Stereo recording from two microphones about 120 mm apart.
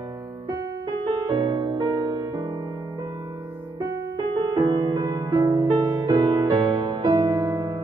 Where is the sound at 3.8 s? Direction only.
35° right (ahead or behind).